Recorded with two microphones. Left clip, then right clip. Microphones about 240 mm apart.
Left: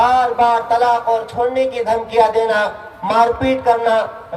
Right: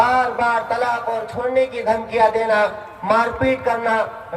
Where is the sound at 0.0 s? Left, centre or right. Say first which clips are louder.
Left 4 dB; left.